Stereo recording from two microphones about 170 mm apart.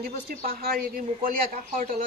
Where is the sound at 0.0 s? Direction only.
60° right (ahead or behind).